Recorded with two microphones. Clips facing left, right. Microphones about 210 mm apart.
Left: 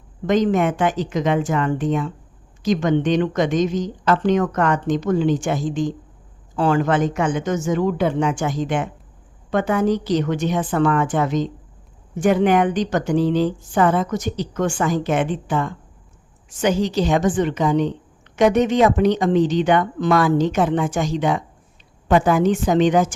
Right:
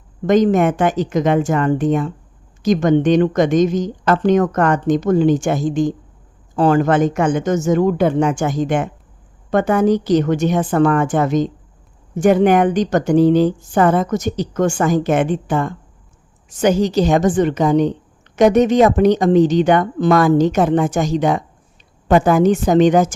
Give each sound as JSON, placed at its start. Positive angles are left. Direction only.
{"t": 0.3, "sound": "a woman's voice", "side_deg": -45}